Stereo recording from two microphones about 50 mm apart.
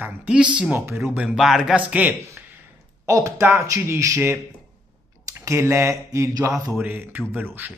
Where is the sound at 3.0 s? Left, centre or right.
Right.